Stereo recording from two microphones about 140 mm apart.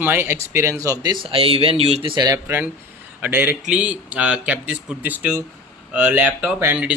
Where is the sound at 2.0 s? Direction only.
30° right (ahead or behind).